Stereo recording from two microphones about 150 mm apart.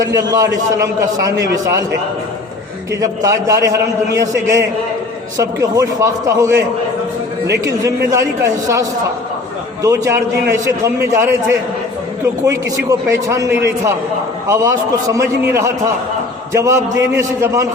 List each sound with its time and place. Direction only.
0.0 s a man's voice: 25° right (ahead or behind)
3.0 s a man's voice: 25° right (ahead or behind)